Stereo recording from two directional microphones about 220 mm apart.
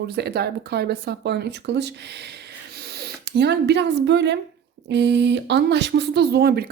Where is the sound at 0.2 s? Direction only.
45° right (ahead or behind).